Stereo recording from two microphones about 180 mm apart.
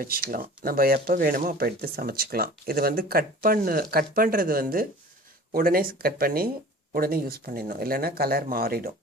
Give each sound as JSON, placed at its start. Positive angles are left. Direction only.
{"t": 0.0, "sound": "speech", "side_deg": -55}